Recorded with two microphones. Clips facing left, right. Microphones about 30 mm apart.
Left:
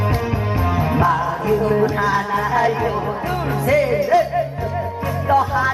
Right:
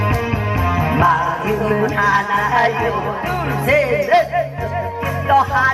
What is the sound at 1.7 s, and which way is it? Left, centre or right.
Music, right.